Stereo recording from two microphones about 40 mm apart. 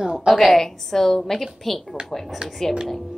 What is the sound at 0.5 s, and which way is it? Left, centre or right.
A woman's voice, centre.